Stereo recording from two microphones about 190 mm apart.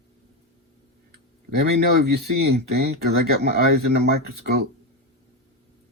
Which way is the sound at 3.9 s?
60° right (ahead or behind).